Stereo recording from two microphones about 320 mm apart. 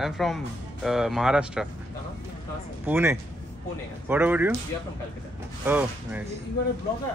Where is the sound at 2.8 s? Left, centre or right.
Centre.